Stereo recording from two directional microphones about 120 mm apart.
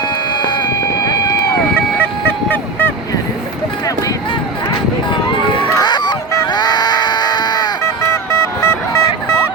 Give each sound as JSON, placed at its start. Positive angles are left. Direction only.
{"t": 0.3, "sound": "vehicle", "side_deg": 40}
{"t": 2.0, "sound": "fowl", "side_deg": 15}
{"t": 5.5, "sound": "a sound", "side_deg": 35}
{"t": 8.1, "sound": "music", "side_deg": 20}